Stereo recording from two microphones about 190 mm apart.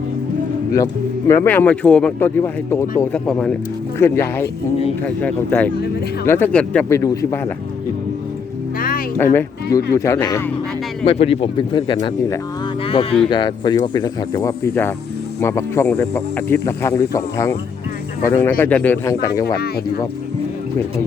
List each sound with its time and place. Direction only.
1.3 s speech: 10° left (ahead or behind)
9.1 s speech: 10° left (ahead or behind)
11.0 s speech: 30° left (ahead or behind)
12.8 s a sound: 30° left (ahead or behind)
13.3 s speech: 25° left (ahead or behind)